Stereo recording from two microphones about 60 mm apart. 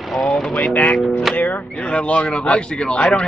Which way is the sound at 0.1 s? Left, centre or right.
Centre.